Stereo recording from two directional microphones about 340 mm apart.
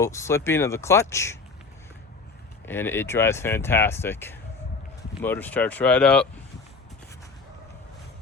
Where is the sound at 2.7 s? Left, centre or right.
Centre.